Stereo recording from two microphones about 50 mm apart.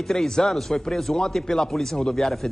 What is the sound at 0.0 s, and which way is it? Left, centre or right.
Speech, centre.